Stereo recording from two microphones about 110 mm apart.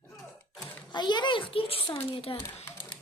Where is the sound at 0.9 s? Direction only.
45° left (ahead or behind); by 2.6 s 60° left (ahead or behind).